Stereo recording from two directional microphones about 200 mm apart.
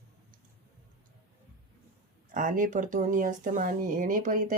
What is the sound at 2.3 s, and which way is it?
Speech, 40° right (ahead or behind).